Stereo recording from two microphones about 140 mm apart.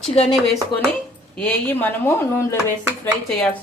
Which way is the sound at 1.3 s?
10° left (ahead or behind).